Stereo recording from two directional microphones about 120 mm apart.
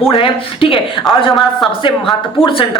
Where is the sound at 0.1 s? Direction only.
50° left (ahead or behind).